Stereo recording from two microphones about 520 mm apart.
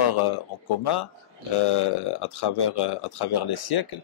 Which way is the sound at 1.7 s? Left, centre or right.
Left.